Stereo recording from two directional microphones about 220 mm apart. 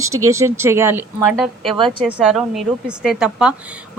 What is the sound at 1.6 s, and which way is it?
Speech, 25° right (ahead or behind).